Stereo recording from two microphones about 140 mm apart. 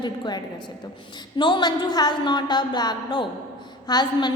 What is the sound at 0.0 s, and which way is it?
A woman's voice, 30° left (ahead or behind).